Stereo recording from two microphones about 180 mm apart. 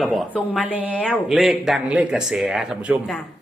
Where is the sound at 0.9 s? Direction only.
5° left (ahead or behind).